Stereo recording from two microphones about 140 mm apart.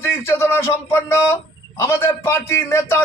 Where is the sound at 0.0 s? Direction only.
15° left (ahead or behind).